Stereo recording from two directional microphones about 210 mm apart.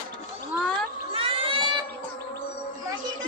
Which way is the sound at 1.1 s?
25° right (ahead or behind).